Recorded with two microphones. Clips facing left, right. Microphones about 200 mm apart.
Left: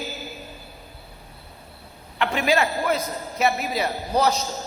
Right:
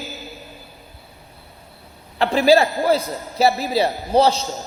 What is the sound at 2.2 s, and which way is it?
Speech, 35° right (ahead or behind).